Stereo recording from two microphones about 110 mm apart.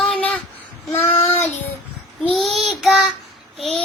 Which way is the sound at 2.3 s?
Centre (ahead or behind).